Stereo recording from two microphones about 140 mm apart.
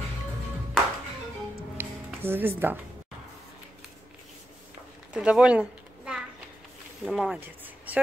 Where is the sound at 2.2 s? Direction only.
15° right (ahead or behind).